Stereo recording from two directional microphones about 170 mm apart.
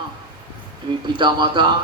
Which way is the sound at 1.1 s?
25° right (ahead or behind).